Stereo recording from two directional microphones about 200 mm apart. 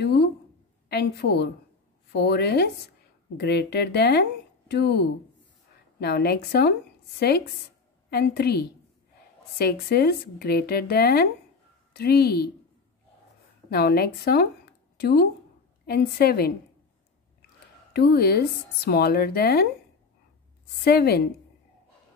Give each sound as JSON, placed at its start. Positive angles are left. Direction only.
{"t": 0.8, "sound": "speech", "side_deg": 50}
{"t": 13.7, "sound": "speech", "side_deg": 50}
{"t": 17.9, "sound": "speech", "side_deg": 55}
{"t": 20.8, "sound": "speech", "side_deg": 50}